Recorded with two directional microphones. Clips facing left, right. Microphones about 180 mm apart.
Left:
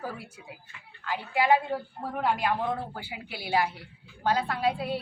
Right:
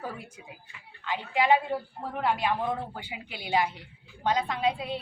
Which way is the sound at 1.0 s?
5° left (ahead or behind).